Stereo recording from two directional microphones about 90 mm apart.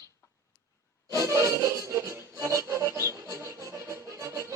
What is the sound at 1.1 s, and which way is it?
Music, 35° right (ahead or behind).